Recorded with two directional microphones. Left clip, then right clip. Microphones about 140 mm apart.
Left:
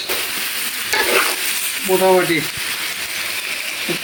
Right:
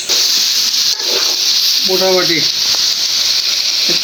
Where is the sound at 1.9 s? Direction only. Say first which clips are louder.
Left 3 dB; 5° left (ahead or behind).